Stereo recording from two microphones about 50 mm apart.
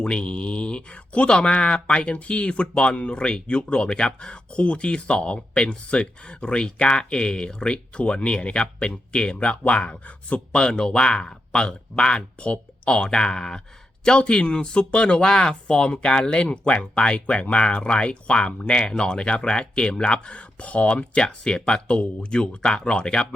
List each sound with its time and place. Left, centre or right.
0.0 s speech: left